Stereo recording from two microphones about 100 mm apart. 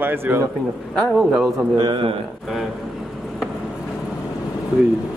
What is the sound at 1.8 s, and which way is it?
Speech, 50° right (ahead or behind).